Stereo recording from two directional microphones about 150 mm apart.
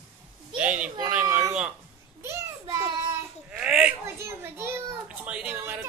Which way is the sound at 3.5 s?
5° right (ahead or behind).